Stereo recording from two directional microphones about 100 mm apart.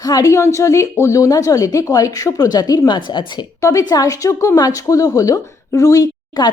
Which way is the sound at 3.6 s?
30° left (ahead or behind).